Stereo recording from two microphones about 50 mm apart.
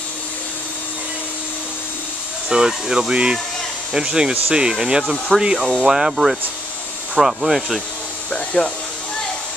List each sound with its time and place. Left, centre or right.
2.5 s speech: centre
8.3 s speech: centre